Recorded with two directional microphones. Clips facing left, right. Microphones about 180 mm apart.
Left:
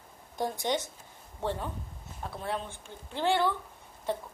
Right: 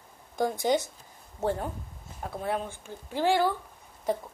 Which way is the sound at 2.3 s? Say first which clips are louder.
Right 4 dB; 45° right (ahead or behind).